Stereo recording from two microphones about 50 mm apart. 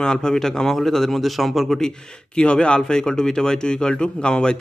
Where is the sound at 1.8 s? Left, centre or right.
Centre.